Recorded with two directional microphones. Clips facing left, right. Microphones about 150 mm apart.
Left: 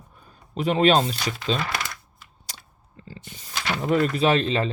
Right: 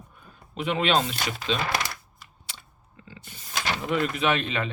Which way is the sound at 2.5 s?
40° left (ahead or behind).